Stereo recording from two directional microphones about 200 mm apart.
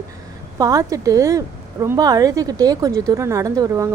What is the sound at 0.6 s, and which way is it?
A woman's voice, 15° right (ahead or behind).